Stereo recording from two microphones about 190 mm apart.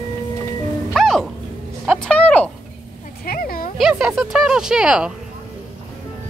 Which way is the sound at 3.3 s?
50° left (ahead or behind).